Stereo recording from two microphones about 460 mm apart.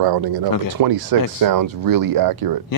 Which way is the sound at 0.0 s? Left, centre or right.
Right.